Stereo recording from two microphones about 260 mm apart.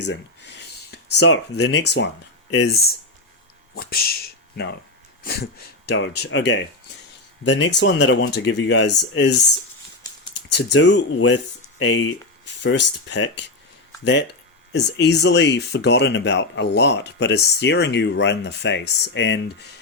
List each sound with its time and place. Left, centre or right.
0.1 s speech: left
3.8 s speech: left
10.5 s speech: left